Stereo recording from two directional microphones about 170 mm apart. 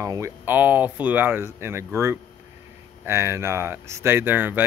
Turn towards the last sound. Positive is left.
turn(degrees=-10)  # may be behind; listen again after turning